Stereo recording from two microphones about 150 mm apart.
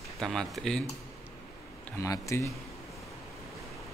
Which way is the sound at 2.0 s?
20° left (ahead or behind).